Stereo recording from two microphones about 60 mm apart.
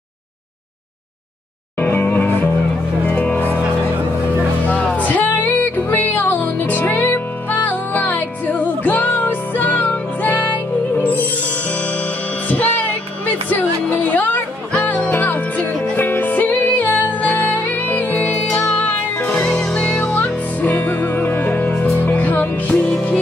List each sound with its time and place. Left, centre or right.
1.8 s music: left
4.6 s music: left
12.4 s music: left
19.4 s music: centre
20.7 s music: left